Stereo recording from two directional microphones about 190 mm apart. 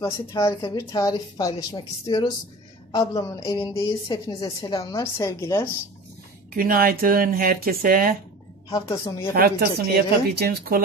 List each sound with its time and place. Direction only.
0.0 s a woman's voice: 15° left (ahead or behind)
6.5 s speech: 50° right (ahead or behind)
8.6 s a woman's voice: 20° left (ahead or behind)
9.3 s speech: 50° right (ahead or behind)